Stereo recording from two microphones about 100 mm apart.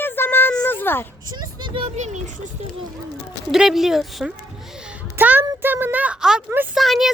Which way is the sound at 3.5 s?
5° right (ahead or behind).